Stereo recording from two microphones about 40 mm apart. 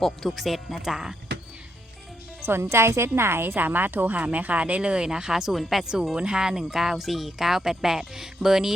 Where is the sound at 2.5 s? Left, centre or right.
Right.